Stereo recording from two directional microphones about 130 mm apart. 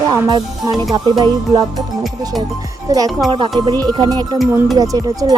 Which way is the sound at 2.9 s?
30° right (ahead or behind).